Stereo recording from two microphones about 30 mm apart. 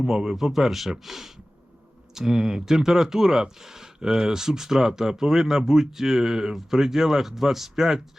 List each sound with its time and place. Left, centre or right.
0.0 s speech: centre